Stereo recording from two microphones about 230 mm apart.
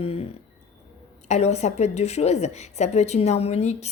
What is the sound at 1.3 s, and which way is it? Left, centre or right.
Speech, left.